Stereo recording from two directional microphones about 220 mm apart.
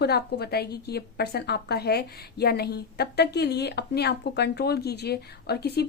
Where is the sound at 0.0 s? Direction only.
50° left (ahead or behind).